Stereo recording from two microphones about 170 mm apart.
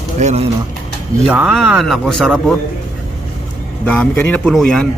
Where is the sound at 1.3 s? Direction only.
5° right (ahead or behind).